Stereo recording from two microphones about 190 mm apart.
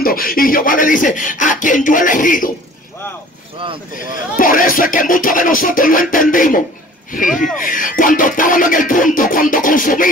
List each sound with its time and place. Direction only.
0.0 s speech: 50° left (ahead or behind)
4.4 s speech: 45° left (ahead or behind)